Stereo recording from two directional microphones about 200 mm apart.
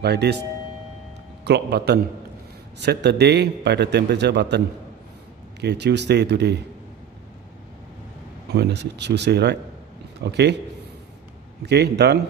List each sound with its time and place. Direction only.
0.0 s a man's voice: 55° right (ahead or behind)
1.4 s a man's voice: 55° right (ahead or behind)
8.5 s a man's voice: 55° right (ahead or behind)
11.6 s a man's voice: 55° right (ahead or behind)